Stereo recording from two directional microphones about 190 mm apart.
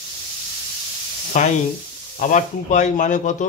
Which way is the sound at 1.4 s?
40° left (ahead or behind).